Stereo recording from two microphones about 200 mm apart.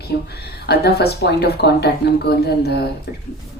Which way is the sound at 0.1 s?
60° left (ahead or behind).